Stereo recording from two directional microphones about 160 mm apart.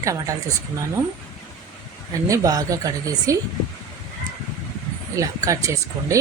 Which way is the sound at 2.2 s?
20° right (ahead or behind).